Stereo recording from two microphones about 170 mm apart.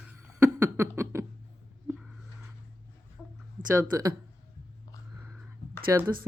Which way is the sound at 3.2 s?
Centre (ahead or behind).